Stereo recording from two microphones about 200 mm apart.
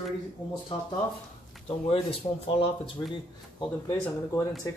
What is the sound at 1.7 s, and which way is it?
Speech, 30° left (ahead or behind).